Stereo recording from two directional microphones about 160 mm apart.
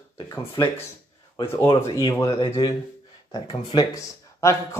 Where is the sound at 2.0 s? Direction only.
30° left (ahead or behind).